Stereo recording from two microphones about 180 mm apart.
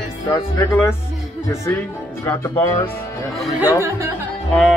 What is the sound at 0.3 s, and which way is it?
Speech, 15° left (ahead or behind).